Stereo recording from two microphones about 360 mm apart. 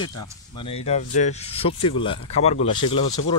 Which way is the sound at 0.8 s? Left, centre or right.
Centre.